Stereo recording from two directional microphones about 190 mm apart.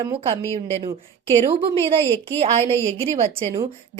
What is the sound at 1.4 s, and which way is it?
A woman's voice, 30° right (ahead or behind).